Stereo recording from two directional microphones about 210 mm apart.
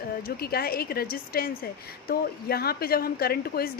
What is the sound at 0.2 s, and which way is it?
A woman's voice, 45° left (ahead or behind).